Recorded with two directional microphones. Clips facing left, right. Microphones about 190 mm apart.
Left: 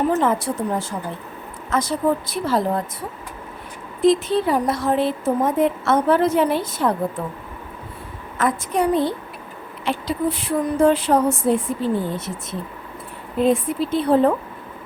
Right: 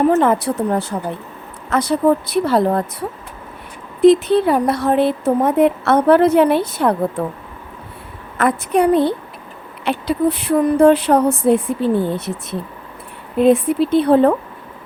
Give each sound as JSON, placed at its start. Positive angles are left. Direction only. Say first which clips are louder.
{"t": 0.2, "sound": "a woman's voice", "louder": "right 5 dB", "side_deg": -65}
{"t": 4.0, "sound": "a woman's voice", "louder": "right 6 dB", "side_deg": -65}
{"t": 8.4, "sound": "a woman's voice", "louder": "right 5 dB", "side_deg": -65}